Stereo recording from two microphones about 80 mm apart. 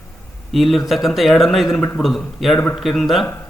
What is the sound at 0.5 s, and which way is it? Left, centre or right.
A man's voice, centre.